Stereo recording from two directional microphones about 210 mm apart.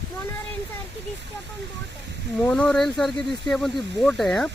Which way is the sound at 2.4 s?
5° left (ahead or behind).